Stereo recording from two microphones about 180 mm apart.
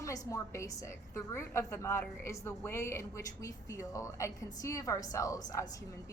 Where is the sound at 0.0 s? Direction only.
20° left (ahead or behind).